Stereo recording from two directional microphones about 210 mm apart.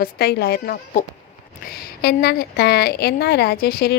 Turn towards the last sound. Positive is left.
turn(degrees=45)  # may be behind; listen again after turning